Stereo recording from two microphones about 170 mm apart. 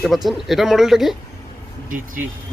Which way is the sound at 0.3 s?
Centre (ahead or behind).